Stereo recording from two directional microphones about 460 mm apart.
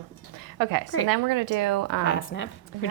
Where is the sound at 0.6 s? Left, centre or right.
Right.